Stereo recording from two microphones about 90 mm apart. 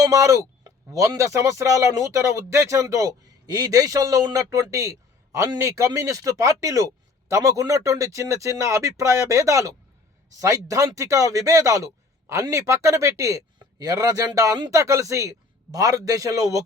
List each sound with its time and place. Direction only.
0.0 s speech: 35° right (ahead or behind)